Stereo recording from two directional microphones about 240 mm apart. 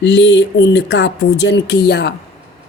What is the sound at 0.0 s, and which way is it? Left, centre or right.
Speech, left.